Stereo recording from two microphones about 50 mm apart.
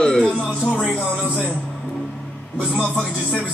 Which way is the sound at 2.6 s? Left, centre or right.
Right.